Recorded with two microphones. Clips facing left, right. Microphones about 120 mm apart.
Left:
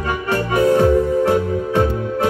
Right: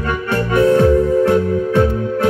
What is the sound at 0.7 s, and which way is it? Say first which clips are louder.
Music: right 1 dB; 15° left (ahead or behind).